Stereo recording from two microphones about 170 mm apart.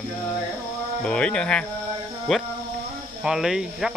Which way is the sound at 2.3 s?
Centre (ahead or behind).